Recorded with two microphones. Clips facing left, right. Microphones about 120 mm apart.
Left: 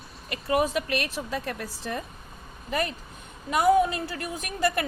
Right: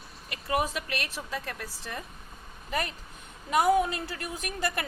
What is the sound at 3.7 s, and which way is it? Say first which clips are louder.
A woman's voice: left 4 dB; 25° left (ahead or behind).